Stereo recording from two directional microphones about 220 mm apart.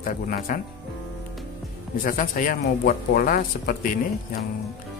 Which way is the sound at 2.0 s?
40° left (ahead or behind).